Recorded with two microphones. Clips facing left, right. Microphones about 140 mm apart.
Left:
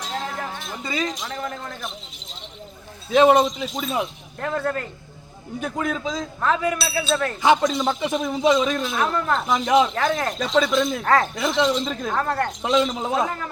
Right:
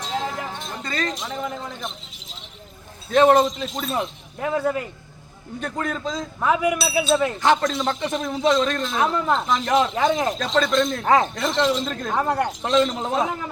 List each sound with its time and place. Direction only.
0.0 s a sound: centre (ahead or behind)
0.9 s speech: 5° left (ahead or behind)
3.1 s speech: 5° left (ahead or behind)
5.5 s speech: 5° left (ahead or behind)
6.4 s speech: 10° right (ahead or behind)
7.4 s speech: centre (ahead or behind)
11.0 s speech: 15° right (ahead or behind)
11.3 s speech: centre (ahead or behind)
12.1 s speech: 15° right (ahead or behind)
12.5 s speech: centre (ahead or behind)